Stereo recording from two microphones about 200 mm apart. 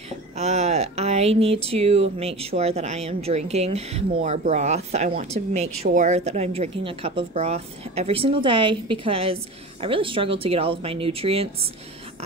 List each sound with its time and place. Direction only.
0.4 s speech: 35° right (ahead or behind)